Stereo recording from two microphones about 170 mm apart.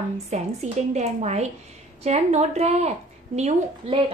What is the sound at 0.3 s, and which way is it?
A woman's voice, 40° right (ahead or behind).